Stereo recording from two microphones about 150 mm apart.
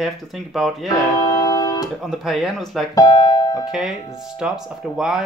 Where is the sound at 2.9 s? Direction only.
25° left (ahead or behind).